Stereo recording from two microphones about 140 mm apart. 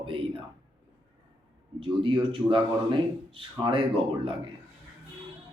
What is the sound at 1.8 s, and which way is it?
Speech, 35° right (ahead or behind).